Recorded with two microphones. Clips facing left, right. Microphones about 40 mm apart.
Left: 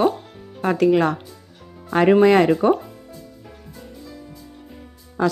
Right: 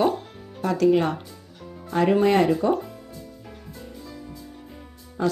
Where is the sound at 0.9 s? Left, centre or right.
Left.